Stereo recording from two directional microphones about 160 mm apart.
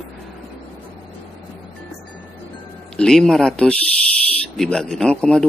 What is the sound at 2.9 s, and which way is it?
A man's voice, 5° left (ahead or behind).